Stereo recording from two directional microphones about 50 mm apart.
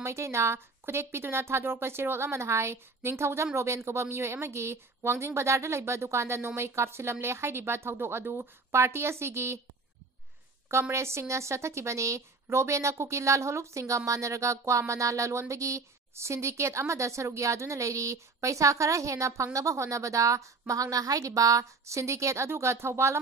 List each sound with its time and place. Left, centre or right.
0.0 s speech: right
0.8 s a woman's voice: right
10.7 s a woman's voice: right
22.5 s speech: right